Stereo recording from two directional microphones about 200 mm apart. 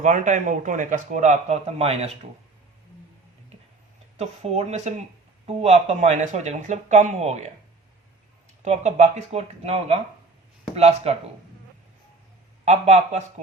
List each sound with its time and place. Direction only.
0.0 s a man's voice: 40° right (ahead or behind)
3.5 s tick-tock: 30° right (ahead or behind)
4.2 s a man's voice: 35° right (ahead or behind)
8.6 s a man's voice: 35° right (ahead or behind)
12.6 s a man's voice: 35° right (ahead or behind)